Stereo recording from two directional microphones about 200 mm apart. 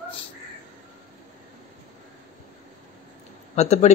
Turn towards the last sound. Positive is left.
turn(degrees=35)  # may be behind; listen again after turning